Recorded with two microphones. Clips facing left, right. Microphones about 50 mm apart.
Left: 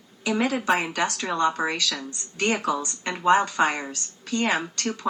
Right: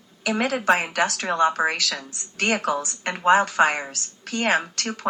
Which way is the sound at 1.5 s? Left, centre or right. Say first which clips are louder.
Right 3 dB; right.